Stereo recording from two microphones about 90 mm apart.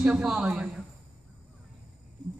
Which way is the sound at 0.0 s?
10° right (ahead or behind).